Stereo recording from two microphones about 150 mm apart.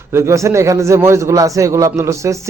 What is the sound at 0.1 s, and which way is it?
A man's voice, 20° right (ahead or behind).